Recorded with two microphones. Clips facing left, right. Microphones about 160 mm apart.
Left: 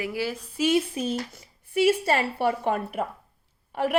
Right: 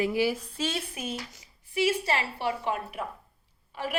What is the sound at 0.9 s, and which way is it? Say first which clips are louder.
Speech: left 7 dB; 30° left (ahead or behind).